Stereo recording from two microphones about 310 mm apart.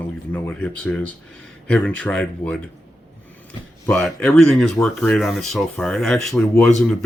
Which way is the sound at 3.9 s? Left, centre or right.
Centre.